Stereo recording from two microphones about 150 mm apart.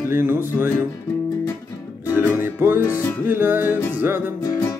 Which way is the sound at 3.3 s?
15° right (ahead or behind).